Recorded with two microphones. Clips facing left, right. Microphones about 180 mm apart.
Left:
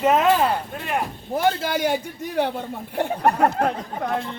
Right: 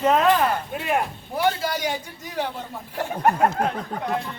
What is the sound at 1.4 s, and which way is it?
Speech, 55° left (ahead or behind).